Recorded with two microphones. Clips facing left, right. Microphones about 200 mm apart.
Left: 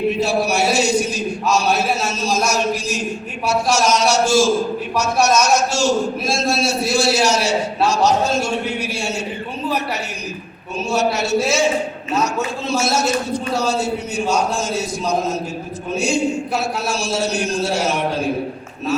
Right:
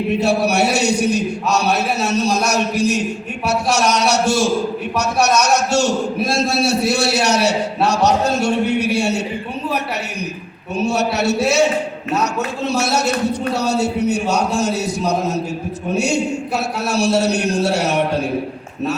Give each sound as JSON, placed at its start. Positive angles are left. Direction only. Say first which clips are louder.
{"t": 0.2, "sound": "a man's voice", "louder": "right 2 dB", "side_deg": -65}
{"t": 10.8, "sound": "a man's voice", "louder": "right 1 dB", "side_deg": -65}